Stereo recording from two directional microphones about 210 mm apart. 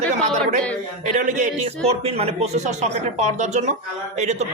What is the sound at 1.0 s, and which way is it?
A man's voice, 35° right (ahead or behind).